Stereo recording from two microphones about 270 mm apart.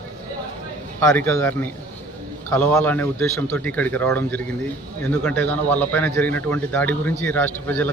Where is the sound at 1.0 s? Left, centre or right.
Centre.